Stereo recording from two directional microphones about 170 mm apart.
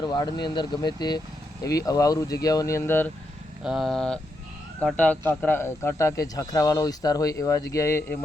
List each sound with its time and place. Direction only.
0.0 s speech: 25° left (ahead or behind)
3.6 s speech: 5° right (ahead or behind); by 8.2 s 15° left (ahead or behind)